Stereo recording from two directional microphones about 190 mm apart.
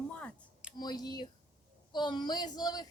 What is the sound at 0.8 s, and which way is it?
A woman's voice, 20° left (ahead or behind).